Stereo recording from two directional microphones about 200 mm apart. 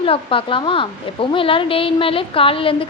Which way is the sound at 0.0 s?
25° left (ahead or behind).